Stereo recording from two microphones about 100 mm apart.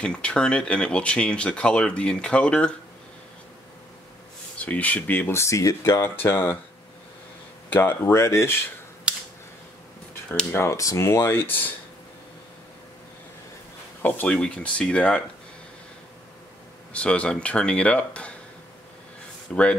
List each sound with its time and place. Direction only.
0.0 s speech: 10° left (ahead or behind)
4.6 s speech: 15° left (ahead or behind)
7.7 s speech: 25° left (ahead or behind)
9.1 s a sound: 10° right (ahead or behind)
10.5 s speech: 30° left (ahead or behind)
14.0 s speech: 15° left (ahead or behind)
16.9 s speech: 10° left (ahead or behind)
19.5 s speech: 10° left (ahead or behind)